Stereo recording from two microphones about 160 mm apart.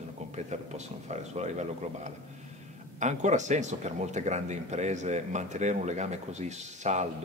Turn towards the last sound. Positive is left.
turn(degrees=-45)  # may be behind; listen again after turning